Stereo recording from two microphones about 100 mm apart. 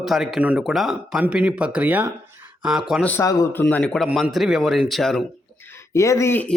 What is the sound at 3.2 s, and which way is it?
Speech, 35° left (ahead or behind).